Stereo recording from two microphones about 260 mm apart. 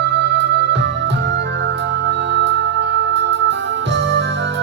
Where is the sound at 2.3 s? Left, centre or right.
Right.